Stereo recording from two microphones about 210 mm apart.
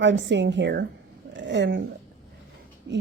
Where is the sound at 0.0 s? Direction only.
60° right (ahead or behind).